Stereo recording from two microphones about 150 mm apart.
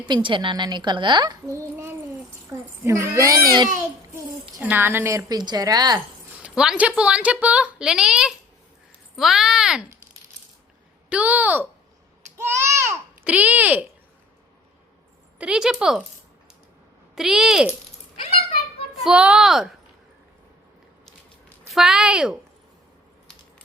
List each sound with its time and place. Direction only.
0.0 s a child's voice: 30° right (ahead or behind)
3.8 s a child's voice: 15° right (ahead or behind)
6.4 s speech: 5° right (ahead or behind)
11.1 s speech: 10° right (ahead or behind)
12.6 s babbling: 15° right (ahead or behind)
15.4 s speech: 5° right (ahead or behind)
17.2 s speech: 5° right (ahead or behind)
18.2 s a sound: 45° left (ahead or behind)
19.0 s speech: 5° right (ahead or behind)
21.7 s speech: centre (ahead or behind)